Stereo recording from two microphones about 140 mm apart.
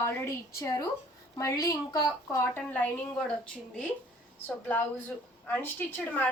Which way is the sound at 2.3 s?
15° left (ahead or behind).